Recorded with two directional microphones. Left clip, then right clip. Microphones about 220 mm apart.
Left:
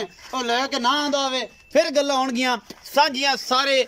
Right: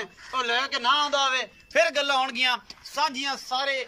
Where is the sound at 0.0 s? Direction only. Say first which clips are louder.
Left 2 dB; 25° left (ahead or behind).